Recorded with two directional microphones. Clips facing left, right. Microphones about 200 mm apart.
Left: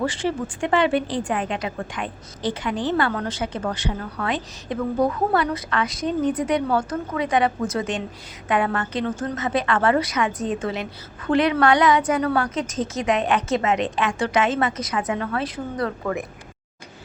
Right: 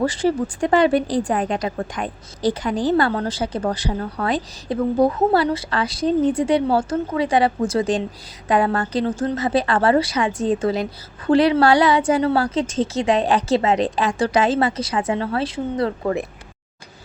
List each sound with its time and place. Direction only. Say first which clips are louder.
0.0 s a woman's voice: right 5 dB; 40° right (ahead or behind)